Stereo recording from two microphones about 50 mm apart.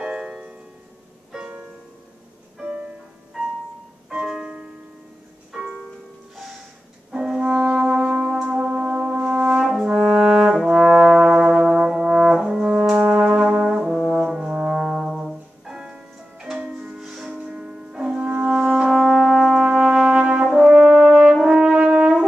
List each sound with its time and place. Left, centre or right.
0.0 s music: centre
2.6 s music: centre
4.1 s music: centre
7.1 s music: centre
7.7 s brass instrument: centre
13.8 s brass instrument: centre
15.6 s music: centre
17.0 s music: centre
17.3 s music: centre
18.3 s french horn: right
18.9 s music: centre
19.6 s brass instrument: centre
20.5 s french horn: centre
21.5 s brass instrument: right